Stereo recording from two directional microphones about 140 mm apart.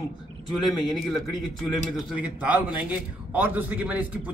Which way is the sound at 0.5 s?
Centre (ahead or behind).